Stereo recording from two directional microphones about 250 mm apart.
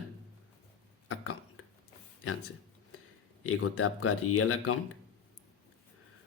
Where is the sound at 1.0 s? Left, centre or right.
Left.